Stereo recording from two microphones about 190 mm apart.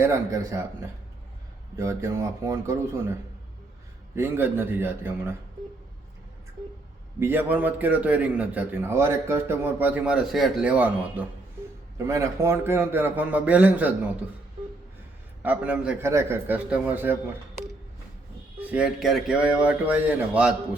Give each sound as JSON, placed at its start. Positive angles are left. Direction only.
{"t": 0.0, "sound": "a man's voice", "side_deg": -15}
{"t": 1.7, "sound": "a man's voice", "side_deg": -15}
{"t": 4.1, "sound": "a man's voice", "side_deg": -10}
{"t": 7.2, "sound": "a man's voice", "side_deg": -10}
{"t": 15.4, "sound": "a man's voice", "side_deg": -5}
{"t": 18.7, "sound": "speech", "side_deg": -5}